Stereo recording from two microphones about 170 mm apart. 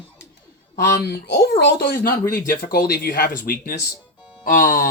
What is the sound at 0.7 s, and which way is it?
Speech, 70° left (ahead or behind).